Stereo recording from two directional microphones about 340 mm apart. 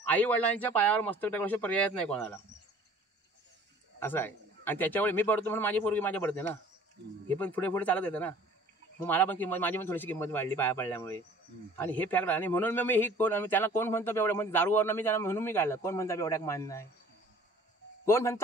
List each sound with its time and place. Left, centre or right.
0.1 s a man's voice: centre
4.0 s a man's voice: centre
18.0 s a man's voice: centre